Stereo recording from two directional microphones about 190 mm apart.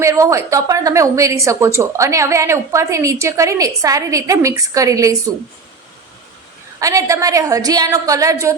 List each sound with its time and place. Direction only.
0.0 s a woman's voice: 15° right (ahead or behind)
6.7 s a woman's voice: 15° right (ahead or behind)